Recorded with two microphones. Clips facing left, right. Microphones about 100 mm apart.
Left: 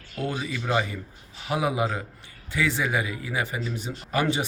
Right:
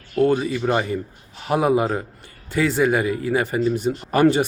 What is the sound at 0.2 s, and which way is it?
A man's voice, 50° right (ahead or behind).